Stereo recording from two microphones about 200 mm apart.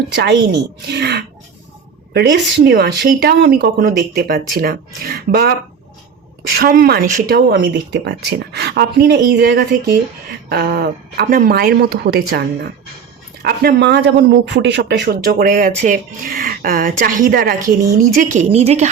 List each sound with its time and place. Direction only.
0.1 s speech: 55° right (ahead or behind)
6.6 s speech: 50° right (ahead or behind)
13.4 s a woman's voice: 55° right (ahead or behind); by 18.9 s 35° right (ahead or behind)